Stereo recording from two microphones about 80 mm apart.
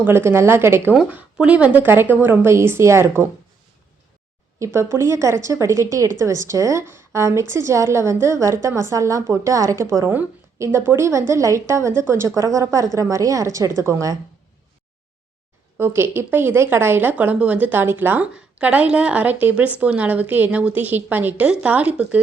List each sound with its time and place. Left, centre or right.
0.0 s a woman's voice: right
1.4 s a woman's voice: centre; by 3.2 s right
4.6 s a woman's voice: right
15.8 s a woman's voice: right